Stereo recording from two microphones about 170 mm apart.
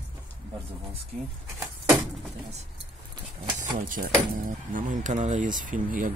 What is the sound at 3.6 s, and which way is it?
Speech, 50° right (ahead or behind).